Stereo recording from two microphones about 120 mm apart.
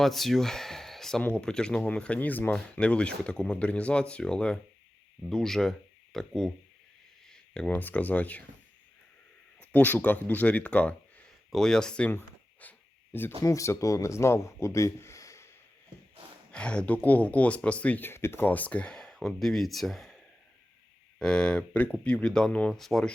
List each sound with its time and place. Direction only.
0.0 s speech: centre (ahead or behind)
7.5 s speech: 10° left (ahead or behind)
9.6 s speech: 15° left (ahead or behind)
13.4 s speech: 25° left (ahead or behind)
16.5 s speech: 10° left (ahead or behind)